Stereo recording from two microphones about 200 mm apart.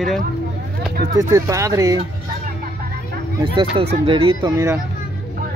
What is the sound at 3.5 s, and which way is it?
Speech, 25° right (ahead or behind).